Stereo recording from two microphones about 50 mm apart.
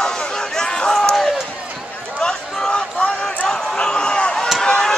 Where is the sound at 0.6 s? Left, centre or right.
Centre.